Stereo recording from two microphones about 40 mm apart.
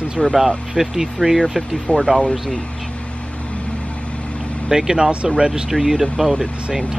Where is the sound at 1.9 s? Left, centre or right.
Left.